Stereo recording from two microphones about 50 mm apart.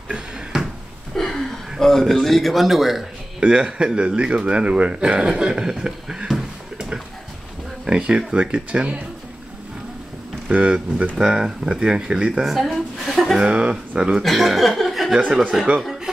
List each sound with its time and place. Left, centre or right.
0.1 s a sound: centre
1.1 s speech: centre
3.3 s speech: centre
10.5 s speech: centre
12.7 s chuckle: centre
13.4 s speech: centre
14.2 s speech: centre